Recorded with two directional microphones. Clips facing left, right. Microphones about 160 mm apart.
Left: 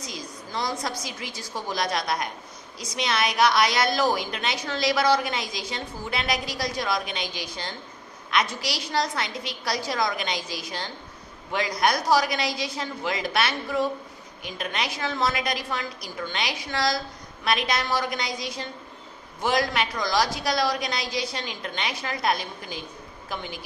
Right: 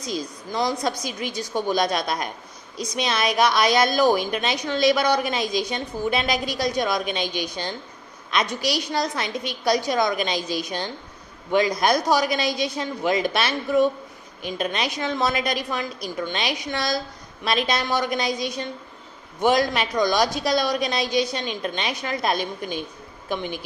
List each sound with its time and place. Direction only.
0.0 s a woman's voice: 25° right (ahead or behind)